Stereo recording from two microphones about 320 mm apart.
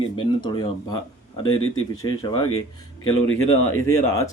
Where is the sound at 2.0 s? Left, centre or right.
Centre.